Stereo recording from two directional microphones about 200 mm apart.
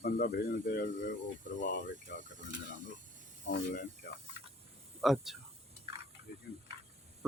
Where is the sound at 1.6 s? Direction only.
65° left (ahead or behind).